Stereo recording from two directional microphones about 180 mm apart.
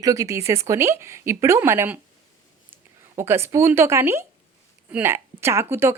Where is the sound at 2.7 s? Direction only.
10° right (ahead or behind).